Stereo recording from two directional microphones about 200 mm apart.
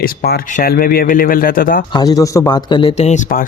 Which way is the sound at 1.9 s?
20° left (ahead or behind).